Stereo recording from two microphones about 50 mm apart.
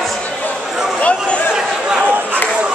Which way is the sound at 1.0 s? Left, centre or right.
Left.